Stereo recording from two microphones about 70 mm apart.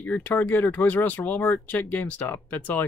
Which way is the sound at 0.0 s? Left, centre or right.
Left.